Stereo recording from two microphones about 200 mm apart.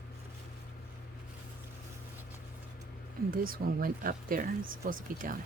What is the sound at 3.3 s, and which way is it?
Speech, 45° right (ahead or behind).